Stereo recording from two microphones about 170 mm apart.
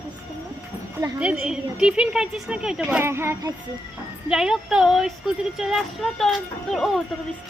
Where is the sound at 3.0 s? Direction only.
15° right (ahead or behind).